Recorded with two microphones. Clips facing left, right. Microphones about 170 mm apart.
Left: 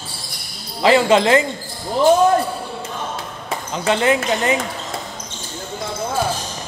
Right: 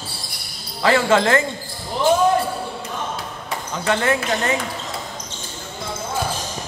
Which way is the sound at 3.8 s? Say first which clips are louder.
Left 3 dB; 20° left (ahead or behind).